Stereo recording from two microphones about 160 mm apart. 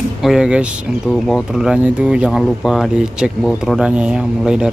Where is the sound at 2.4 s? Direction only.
5° left (ahead or behind).